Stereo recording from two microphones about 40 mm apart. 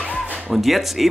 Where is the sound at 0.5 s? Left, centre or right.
Centre.